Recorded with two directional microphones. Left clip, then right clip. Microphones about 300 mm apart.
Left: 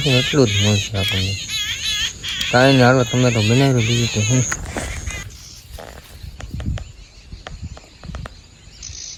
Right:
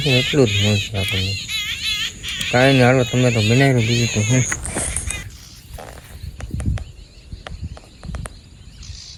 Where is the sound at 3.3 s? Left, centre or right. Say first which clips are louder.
Right 1 dB; left.